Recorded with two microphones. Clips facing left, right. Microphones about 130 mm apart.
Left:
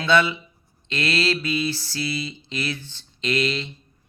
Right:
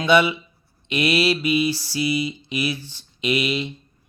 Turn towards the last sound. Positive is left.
turn(degrees=-10)  # may be behind; listen again after turning